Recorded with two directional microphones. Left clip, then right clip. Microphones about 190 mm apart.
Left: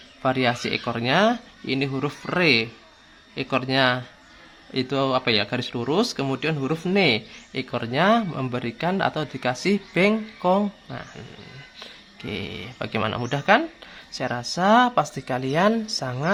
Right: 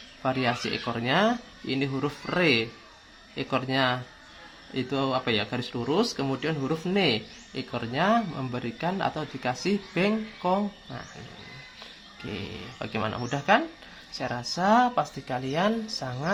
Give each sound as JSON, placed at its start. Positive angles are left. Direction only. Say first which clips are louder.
{"t": 0.2, "sound": "speech", "louder": "left 5 dB", "side_deg": 35}